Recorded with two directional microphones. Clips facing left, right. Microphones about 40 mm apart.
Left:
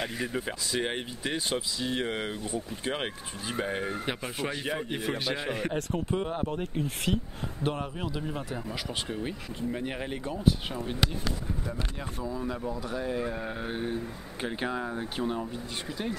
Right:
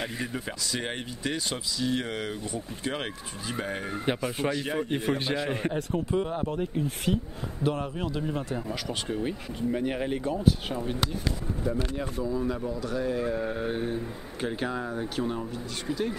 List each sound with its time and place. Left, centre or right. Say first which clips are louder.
0.0 s speech: left 1 dB; centre
6.6 s speech: right 2 dB; left
7.8 s speech: right 3 dB; centre
8.7 s speech: right 1 dB; centre
9.1 s speech: right 4 dB; centre